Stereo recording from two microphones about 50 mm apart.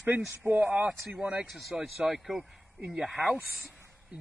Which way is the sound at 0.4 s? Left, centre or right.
Centre.